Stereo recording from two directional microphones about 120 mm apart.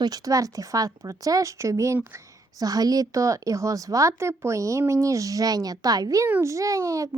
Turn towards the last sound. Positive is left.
turn(degrees=-30)  # may be behind; listen again after turning